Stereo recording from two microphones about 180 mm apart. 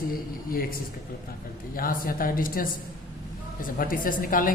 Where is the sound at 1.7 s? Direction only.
50° left (ahead or behind).